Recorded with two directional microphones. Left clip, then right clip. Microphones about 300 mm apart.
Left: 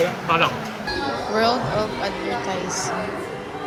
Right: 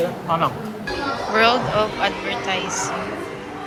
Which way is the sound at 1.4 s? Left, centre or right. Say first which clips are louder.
Right 4 dB; centre.